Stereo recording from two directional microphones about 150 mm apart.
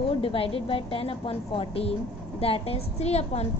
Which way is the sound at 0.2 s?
40° left (ahead or behind).